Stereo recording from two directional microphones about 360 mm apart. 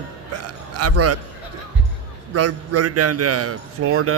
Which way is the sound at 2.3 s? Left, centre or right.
Right.